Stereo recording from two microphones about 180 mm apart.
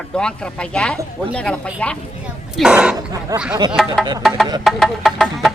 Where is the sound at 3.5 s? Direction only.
25° right (ahead or behind).